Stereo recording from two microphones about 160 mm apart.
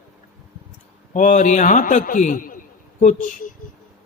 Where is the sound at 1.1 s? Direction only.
50° left (ahead or behind).